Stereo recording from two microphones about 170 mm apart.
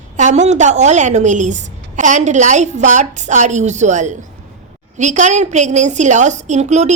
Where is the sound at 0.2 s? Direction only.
45° right (ahead or behind).